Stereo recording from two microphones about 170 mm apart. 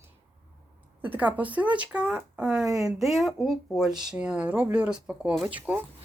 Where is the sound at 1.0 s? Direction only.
10° right (ahead or behind).